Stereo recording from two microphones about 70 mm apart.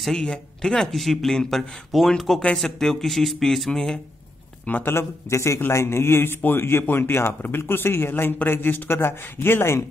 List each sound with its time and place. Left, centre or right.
0.2 s speech: centre
4.6 s a man's voice: left
4.9 s a man's voice: left